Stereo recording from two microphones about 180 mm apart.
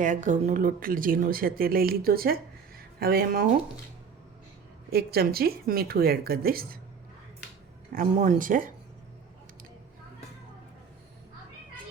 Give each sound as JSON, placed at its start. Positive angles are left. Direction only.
{"t": 0.0, "sound": "speech", "side_deg": -45}
{"t": 4.9, "sound": "speech", "side_deg": -60}
{"t": 7.9, "sound": "speech", "side_deg": -45}